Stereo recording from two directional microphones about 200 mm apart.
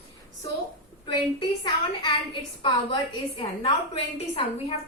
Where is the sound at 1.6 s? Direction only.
20° left (ahead or behind).